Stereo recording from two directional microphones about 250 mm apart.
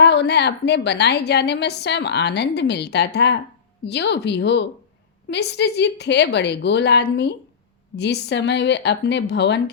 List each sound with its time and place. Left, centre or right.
0.0 s a woman's voice: left